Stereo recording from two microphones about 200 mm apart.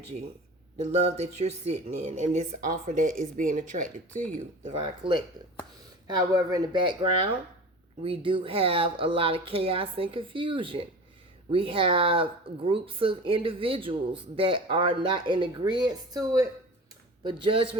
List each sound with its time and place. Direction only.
1.0 s speech: 35° right (ahead or behind)
4.6 s speech: 25° right (ahead or behind)